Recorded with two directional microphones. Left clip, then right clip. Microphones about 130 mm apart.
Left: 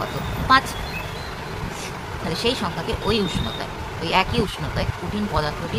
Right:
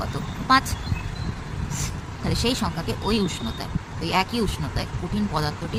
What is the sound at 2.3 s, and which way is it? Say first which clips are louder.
Speech: left 2 dB; 35° right (ahead or behind).